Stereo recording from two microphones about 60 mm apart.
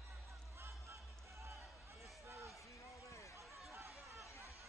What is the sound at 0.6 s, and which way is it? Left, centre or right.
Music, right.